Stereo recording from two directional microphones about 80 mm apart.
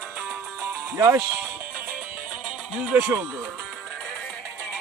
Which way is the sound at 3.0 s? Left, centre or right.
Right.